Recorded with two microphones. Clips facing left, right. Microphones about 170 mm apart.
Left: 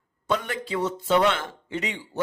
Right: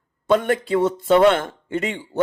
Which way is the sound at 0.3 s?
55° right (ahead or behind).